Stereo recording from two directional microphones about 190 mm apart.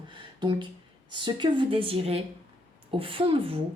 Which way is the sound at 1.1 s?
25° right (ahead or behind).